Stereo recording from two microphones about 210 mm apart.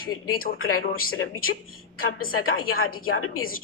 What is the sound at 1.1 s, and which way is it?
A man's voice, 75° left (ahead or behind).